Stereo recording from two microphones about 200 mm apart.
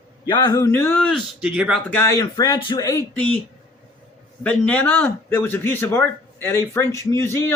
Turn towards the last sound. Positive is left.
turn(degrees=10)  # may be behind; listen again after turning